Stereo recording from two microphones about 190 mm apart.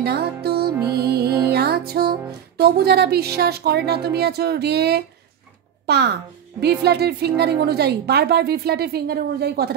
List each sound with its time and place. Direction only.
0.0 s music: 55° right (ahead or behind)
5.9 s a child's voice: 60° right (ahead or behind)